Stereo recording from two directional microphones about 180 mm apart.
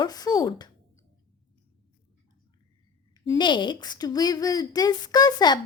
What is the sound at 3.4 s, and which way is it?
A woman's voice, 25° left (ahead or behind).